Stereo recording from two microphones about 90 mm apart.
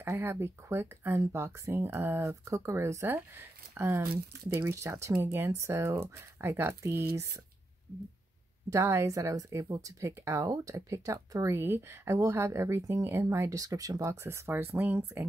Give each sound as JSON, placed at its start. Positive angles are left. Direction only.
{"t": 0.0, "sound": "speech", "side_deg": -25}
{"t": 8.6, "sound": "speech", "side_deg": -30}